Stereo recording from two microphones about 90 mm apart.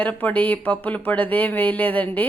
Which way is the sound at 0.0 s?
15° left (ahead or behind).